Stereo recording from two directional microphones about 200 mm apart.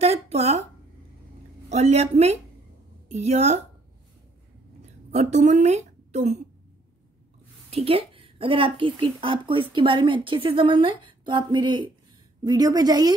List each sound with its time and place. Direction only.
0.0 s a sound: 30° right (ahead or behind)
1.7 s a woman's voice: 30° right (ahead or behind)
5.1 s a woman's voice: 35° right (ahead or behind)
7.7 s a woman's voice: 30° right (ahead or behind)